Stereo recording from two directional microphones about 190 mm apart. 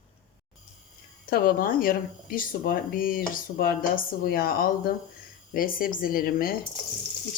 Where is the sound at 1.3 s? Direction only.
50° left (ahead or behind).